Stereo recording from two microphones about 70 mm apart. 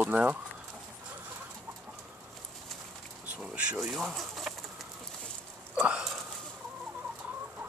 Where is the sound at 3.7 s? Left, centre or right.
Centre.